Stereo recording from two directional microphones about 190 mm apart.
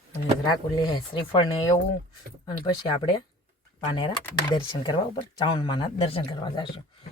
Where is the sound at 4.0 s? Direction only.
25° left (ahead or behind).